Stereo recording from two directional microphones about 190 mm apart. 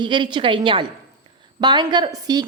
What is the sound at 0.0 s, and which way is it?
A woman's voice, 25° right (ahead or behind).